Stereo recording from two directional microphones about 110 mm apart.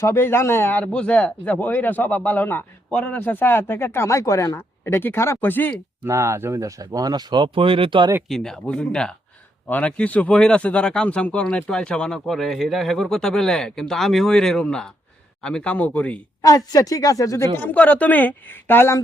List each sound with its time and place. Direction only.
0.0 s speech: 25° left (ahead or behind)
6.1 s speech: 25° right (ahead or behind); by 8.1 s 50° right (ahead or behind)
8.3 s speech: 5° left (ahead or behind)
16.4 s speech: 30° left (ahead or behind)
17.6 s speech: 15° left (ahead or behind)